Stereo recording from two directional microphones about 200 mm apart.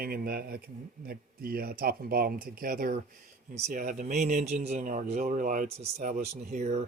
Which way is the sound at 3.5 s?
35° right (ahead or behind).